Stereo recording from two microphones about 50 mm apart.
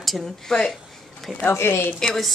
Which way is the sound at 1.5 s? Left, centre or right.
Left.